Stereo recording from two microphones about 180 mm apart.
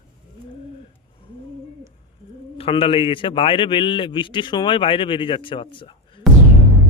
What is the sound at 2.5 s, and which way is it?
A man's voice, 30° left (ahead or behind).